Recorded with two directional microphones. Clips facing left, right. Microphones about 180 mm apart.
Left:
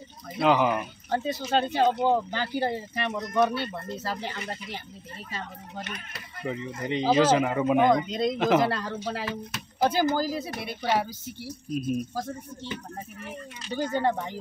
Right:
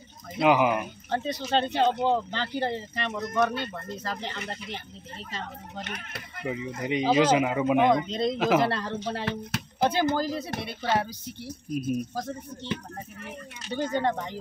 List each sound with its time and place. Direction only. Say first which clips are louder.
0.4 s speech: right 1 dB; 15° right (ahead or behind)
1.1 s speech: left 1 dB; 5° left (ahead or behind)
5.9 s speech: right 1 dB; 60° right (ahead or behind)
6.4 s speech: even; 10° right (ahead or behind)
13.9 s speech: left 1 dB; 5° left (ahead or behind)